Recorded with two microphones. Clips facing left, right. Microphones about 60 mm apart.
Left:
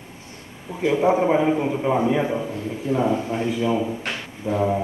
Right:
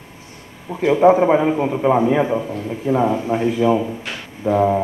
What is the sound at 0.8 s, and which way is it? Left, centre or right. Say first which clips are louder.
A man's voice: right 6 dB; right.